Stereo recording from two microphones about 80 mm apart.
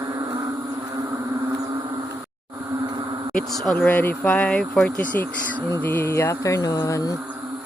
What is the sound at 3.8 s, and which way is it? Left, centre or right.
Speech, left.